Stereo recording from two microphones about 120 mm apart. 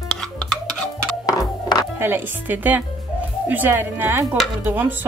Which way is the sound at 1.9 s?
20° right (ahead or behind).